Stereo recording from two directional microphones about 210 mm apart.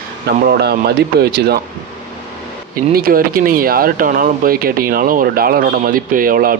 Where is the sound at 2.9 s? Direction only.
45° right (ahead or behind).